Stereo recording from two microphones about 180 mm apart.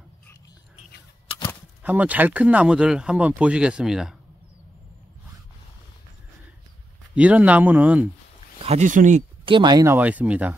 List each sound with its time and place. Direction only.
1.8 s speech: 10° right (ahead or behind)
7.2 s speech: 10° right (ahead or behind)
8.6 s speech: 40° right (ahead or behind)
9.4 s speech: 25° right (ahead or behind)
9.9 s speech: 10° right (ahead or behind)